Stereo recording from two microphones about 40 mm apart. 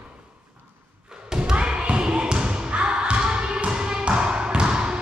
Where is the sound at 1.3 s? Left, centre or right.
Right.